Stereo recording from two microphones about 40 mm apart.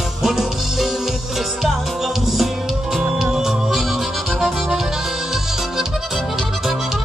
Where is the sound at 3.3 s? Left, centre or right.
Centre.